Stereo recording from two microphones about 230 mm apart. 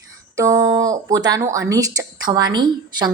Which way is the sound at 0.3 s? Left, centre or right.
Centre.